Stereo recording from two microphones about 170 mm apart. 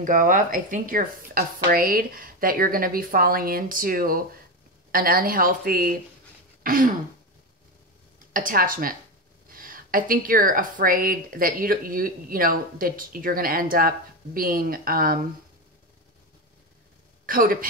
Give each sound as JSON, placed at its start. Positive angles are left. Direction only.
{"t": 0.0, "sound": "a woman's voice", "side_deg": -50}
{"t": 6.6, "sound": "throat clearing", "side_deg": -55}
{"t": 8.3, "sound": "a woman's voice", "side_deg": -55}
{"t": 17.3, "sound": "a woman's voice", "side_deg": -55}